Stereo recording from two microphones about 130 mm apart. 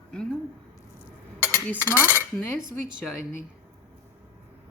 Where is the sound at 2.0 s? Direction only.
15° right (ahead or behind).